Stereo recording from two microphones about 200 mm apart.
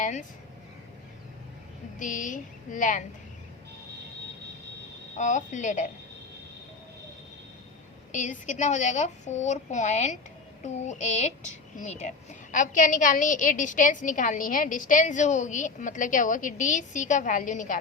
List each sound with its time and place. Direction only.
0.0 s a woman's voice: 40° left (ahead or behind)
2.0 s a woman's voice: 40° left (ahead or behind)
5.1 s a woman's voice: 35° left (ahead or behind)
8.1 s a woman's voice: 40° left (ahead or behind)